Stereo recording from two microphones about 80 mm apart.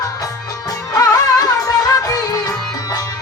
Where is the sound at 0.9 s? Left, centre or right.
Left.